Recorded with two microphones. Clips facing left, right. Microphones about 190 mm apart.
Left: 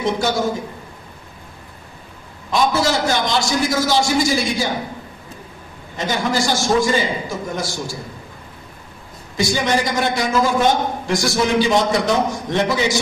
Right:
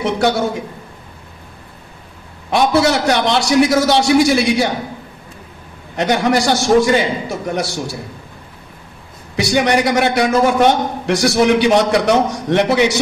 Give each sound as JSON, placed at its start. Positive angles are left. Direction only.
{"t": 0.0, "sound": "a man's voice", "side_deg": -65}
{"t": 2.5, "sound": "a man's voice", "side_deg": -65}
{"t": 5.9, "sound": "a man's voice", "side_deg": -65}
{"t": 9.4, "sound": "a man's voice", "side_deg": -65}